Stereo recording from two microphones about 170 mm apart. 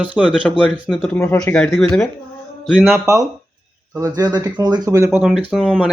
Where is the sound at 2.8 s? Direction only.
15° right (ahead or behind).